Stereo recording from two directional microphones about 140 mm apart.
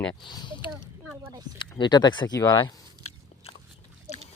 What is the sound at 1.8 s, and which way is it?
Speech, 30° left (ahead or behind).